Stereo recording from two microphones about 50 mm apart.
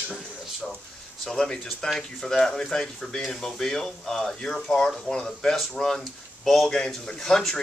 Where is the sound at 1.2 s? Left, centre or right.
Centre.